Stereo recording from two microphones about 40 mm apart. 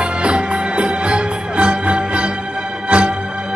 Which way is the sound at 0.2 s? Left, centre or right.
Right.